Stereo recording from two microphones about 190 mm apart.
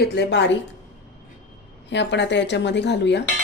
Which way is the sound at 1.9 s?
70° left (ahead or behind).